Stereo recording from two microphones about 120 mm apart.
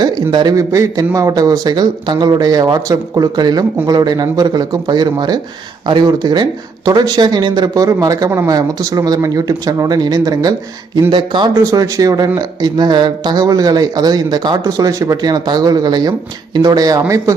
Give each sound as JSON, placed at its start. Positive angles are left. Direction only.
{"t": 0.0, "sound": "speech", "side_deg": -40}
{"t": 11.5, "sound": "speech", "side_deg": -30}